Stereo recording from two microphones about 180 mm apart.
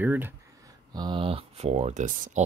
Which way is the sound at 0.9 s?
25° right (ahead or behind).